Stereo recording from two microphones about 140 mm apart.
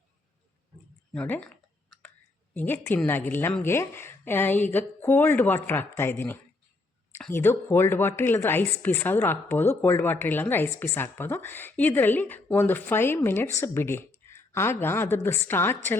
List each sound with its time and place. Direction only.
1.1 s clicking: 10° left (ahead or behind)
3.6 s a woman's voice: 15° left (ahead or behind)